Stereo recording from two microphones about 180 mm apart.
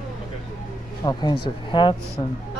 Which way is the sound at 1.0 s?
25° left (ahead or behind).